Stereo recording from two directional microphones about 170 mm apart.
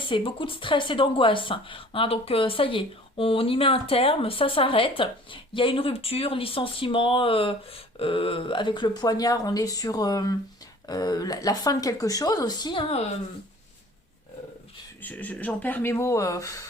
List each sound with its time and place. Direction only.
0.1 s speech: 30° left (ahead or behind)
15.0 s speech: 10° left (ahead or behind)